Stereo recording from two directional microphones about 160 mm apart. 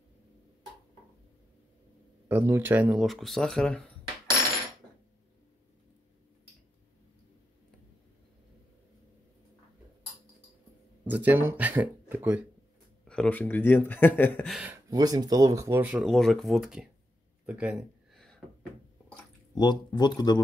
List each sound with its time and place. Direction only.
2.2 s speech: 15° right (ahead or behind)
3.1 s speech: centre (ahead or behind)
11.1 s speech: 10° right (ahead or behind)
13.0 s speech: 5° left (ahead or behind)
14.5 s speech: 5° right (ahead or behind)
14.9 s speech: 25° right (ahead or behind)
16.1 s speech: centre (ahead or behind)
19.5 s speech: 30° left (ahead or behind)